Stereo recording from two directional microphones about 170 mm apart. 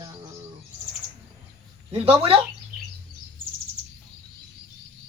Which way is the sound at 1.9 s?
35° right (ahead or behind).